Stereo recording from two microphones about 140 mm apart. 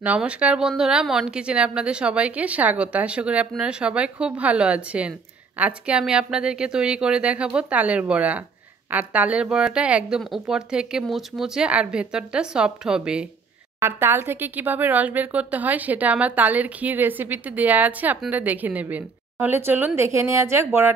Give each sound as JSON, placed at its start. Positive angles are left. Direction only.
{"t": 0.0, "sound": "a woman's voice", "side_deg": -10}